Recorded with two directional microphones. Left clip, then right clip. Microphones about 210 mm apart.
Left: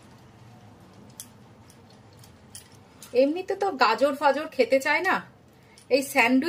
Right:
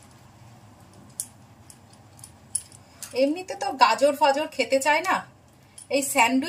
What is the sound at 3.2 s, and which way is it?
A woman's voice, 20° left (ahead or behind).